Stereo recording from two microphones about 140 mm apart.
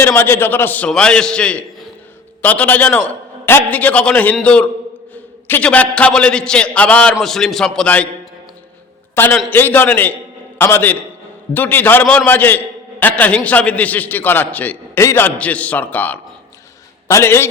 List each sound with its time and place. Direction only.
0.0 s a man's voice: 15° left (ahead or behind)
9.1 s a man's voice: 15° left (ahead or behind)